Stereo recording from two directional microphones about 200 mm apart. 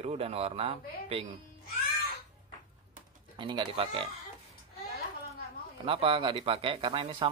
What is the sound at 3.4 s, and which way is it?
Speech, 25° right (ahead or behind).